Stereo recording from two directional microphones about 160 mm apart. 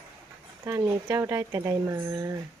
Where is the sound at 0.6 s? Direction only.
20° right (ahead or behind).